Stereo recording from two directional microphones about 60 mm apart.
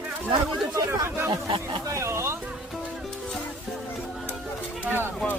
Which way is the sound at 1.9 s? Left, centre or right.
Right.